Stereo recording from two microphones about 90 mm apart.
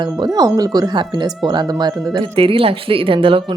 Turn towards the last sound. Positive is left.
turn(degrees=-85)